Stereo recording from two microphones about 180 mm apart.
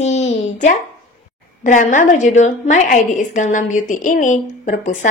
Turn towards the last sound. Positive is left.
turn(degrees=40)  # may be behind; listen again after turning